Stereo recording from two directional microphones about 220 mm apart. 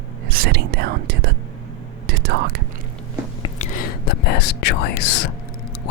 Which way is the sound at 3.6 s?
40° left (ahead or behind).